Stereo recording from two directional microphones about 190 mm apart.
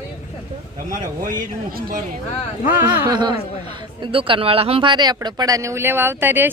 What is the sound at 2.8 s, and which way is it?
A man's voice, 25° right (ahead or behind).